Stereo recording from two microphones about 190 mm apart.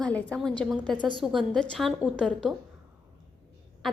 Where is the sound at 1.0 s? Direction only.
25° right (ahead or behind).